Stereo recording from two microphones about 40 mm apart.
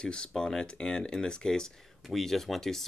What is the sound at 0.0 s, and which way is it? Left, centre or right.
Speech, left.